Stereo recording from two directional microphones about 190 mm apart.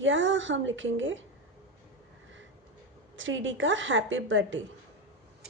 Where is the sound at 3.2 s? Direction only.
85° right.